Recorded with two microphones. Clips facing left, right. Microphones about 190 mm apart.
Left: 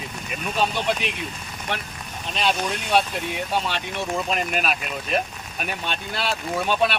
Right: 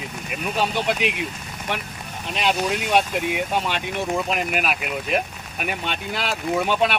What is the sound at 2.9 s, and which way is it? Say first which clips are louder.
Speech: right 1 dB; 15° right (ahead or behind).